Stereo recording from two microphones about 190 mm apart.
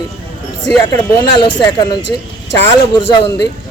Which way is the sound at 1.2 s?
25° left (ahead or behind).